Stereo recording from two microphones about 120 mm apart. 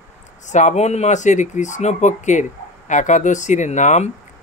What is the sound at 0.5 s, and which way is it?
Speech, 85° left.